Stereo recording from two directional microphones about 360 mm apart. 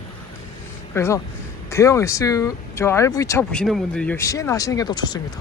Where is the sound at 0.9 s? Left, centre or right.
Centre.